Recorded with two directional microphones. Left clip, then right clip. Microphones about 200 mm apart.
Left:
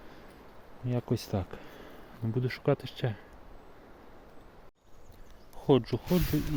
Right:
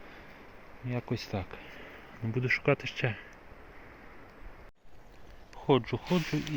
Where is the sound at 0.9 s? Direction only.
45° left (ahead or behind).